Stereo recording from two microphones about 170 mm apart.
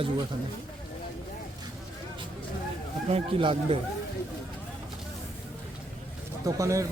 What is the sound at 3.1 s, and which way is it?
Speech, 35° right (ahead or behind).